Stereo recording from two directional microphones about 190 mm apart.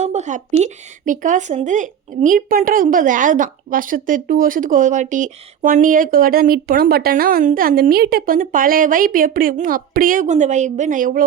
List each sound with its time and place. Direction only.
0.0 s speech: 35° right (ahead or behind)